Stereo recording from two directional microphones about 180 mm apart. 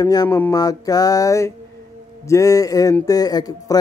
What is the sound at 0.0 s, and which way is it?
Speech, 20° left (ahead or behind).